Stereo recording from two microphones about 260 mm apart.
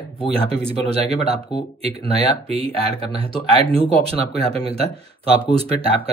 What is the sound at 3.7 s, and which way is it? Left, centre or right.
Speech, right.